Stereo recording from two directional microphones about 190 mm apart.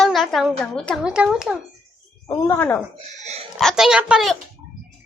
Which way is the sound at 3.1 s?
35° right (ahead or behind).